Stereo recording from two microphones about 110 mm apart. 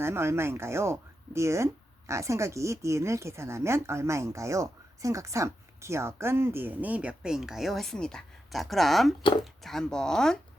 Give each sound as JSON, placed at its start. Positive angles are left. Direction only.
{"t": 0.0, "sound": "speech", "side_deg": -25}